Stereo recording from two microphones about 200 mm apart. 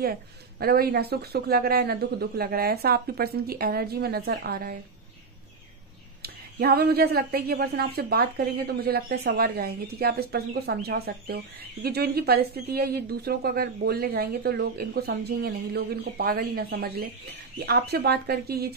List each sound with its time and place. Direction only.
0.0 s a woman's voice: 50° right (ahead or behind)
6.2 s a woman's voice: 50° right (ahead or behind)